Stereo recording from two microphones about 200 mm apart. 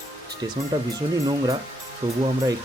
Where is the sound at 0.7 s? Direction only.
25° right (ahead or behind).